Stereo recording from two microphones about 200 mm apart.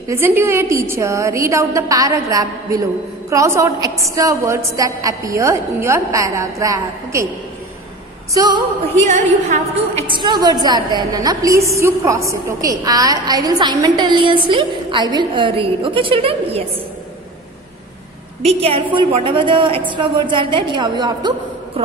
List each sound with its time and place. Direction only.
0.1 s a woman's voice: 10° right (ahead or behind)
8.3 s a woman's voice: 20° right (ahead or behind)
9.0 s a woman's voice: 35° right (ahead or behind)
10.1 s a woman's voice: 25° right (ahead or behind)
18.4 s a woman's voice: 30° right (ahead or behind)